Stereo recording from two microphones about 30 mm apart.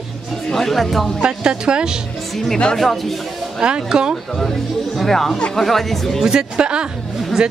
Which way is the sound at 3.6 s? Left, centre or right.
Right.